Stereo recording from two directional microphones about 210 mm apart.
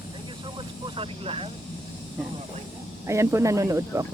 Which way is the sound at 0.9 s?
25° right (ahead or behind).